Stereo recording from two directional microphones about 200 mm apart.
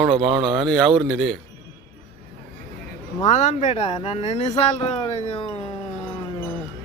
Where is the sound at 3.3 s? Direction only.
35° left (ahead or behind).